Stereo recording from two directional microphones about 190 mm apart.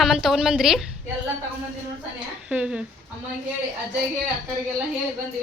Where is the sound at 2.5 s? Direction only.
5° right (ahead or behind).